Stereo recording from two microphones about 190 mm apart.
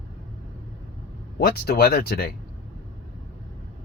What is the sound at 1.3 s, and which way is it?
Speech, 55° left (ahead or behind).